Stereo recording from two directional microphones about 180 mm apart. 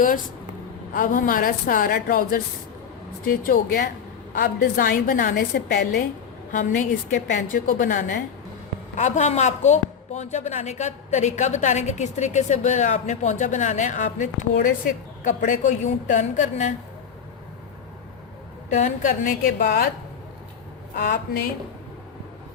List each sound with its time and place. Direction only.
0.9 s a woman's voice: 45° left (ahead or behind)
18.7 s a woman's voice: 40° left (ahead or behind)
20.9 s a woman's voice: 50° left (ahead or behind)